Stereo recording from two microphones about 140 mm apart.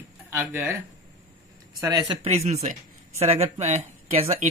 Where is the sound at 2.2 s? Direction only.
50° right (ahead or behind).